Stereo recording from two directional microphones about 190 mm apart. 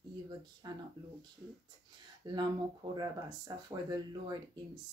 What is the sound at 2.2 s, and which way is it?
Speech, 25° right (ahead or behind).